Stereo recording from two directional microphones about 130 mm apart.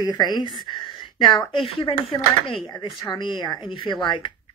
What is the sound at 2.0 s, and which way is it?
Speech, centre (ahead or behind).